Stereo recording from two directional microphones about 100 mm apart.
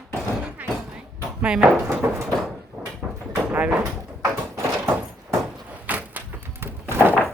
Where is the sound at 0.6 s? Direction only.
15° right (ahead or behind).